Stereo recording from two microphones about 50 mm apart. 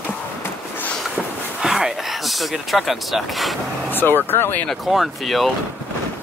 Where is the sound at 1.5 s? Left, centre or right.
Centre.